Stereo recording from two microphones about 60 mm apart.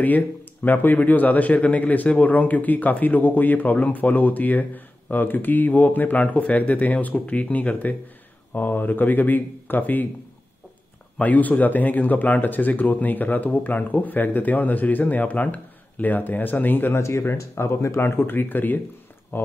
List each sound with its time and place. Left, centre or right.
0.7 s a man's voice: left
11.1 s a man's voice: left